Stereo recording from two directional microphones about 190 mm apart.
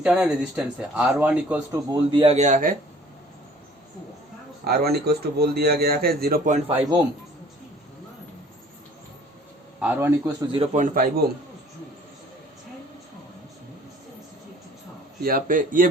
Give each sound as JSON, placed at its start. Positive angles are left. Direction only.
{"t": 0.0, "sound": "a man's voice", "side_deg": -5}
{"t": 1.9, "sound": "speech", "side_deg": -25}
{"t": 4.6, "sound": "a man's voice", "side_deg": -55}
{"t": 9.8, "sound": "a man's voice", "side_deg": -10}
{"t": 10.5, "sound": "speech", "side_deg": -35}
{"t": 15.2, "sound": "a man's voice", "side_deg": -50}